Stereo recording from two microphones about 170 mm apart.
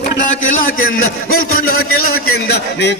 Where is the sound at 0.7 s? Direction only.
60° left (ahead or behind).